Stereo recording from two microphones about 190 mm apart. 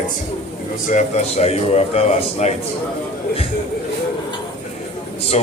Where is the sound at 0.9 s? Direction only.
35° left (ahead or behind).